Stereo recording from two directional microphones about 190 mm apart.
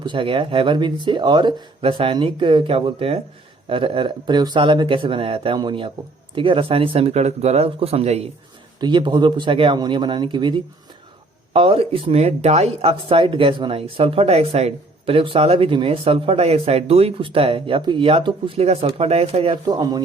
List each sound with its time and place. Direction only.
0.0 s speech: 25° right (ahead or behind)
19.6 s speech: 20° right (ahead or behind)